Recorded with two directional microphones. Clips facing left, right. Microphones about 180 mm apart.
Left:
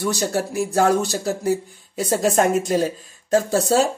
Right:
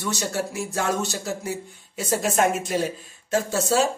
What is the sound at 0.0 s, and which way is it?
Speech, 35° left (ahead or behind).